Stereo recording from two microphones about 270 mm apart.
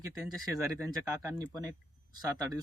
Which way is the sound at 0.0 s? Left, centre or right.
Centre.